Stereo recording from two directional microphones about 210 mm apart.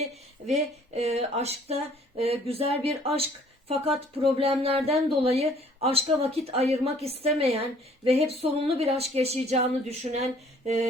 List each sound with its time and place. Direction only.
0.0 s speech: 30° right (ahead or behind)
4.4 s speech: 25° right (ahead or behind)